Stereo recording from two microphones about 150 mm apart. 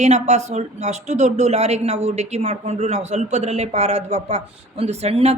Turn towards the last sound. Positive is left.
turn(degrees=-45)  # may be behind; listen again after turning